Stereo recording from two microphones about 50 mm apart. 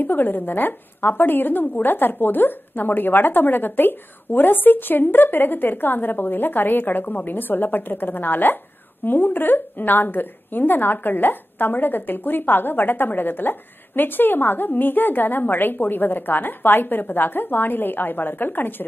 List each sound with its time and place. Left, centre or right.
0.0 s a woman's voice: left